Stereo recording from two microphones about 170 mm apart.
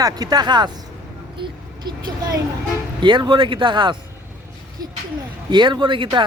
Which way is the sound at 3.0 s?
25° right (ahead or behind).